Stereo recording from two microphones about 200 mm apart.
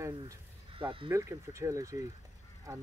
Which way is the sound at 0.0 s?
20° right (ahead or behind).